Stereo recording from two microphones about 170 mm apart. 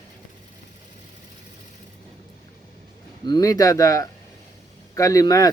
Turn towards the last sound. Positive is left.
turn(degrees=20)  # may be behind; listen again after turning